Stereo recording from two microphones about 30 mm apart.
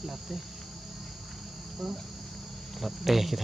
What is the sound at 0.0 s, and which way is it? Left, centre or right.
Speech, centre.